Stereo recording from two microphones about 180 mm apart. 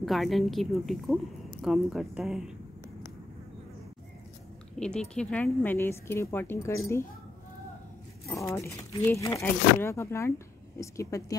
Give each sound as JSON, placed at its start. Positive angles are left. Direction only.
{"t": 0.0, "sound": "a woman's voice", "side_deg": 0}
{"t": 4.7, "sound": "speech", "side_deg": 5}
{"t": 8.3, "sound": "speech", "side_deg": 15}